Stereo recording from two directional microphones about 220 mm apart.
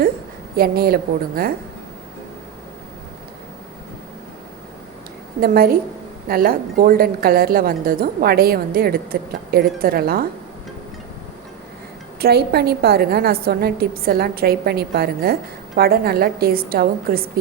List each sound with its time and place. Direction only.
0.5 s a woman's voice: 45° right (ahead or behind)
5.4 s a woman's voice: 45° right (ahead or behind)
12.2 s a woman's voice: 45° right (ahead or behind)